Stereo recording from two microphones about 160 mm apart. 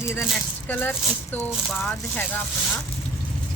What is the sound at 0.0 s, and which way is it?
Speech, 15° left (ahead or behind).